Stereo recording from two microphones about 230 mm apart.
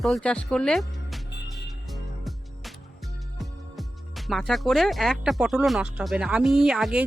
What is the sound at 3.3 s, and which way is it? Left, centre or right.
Speech, centre.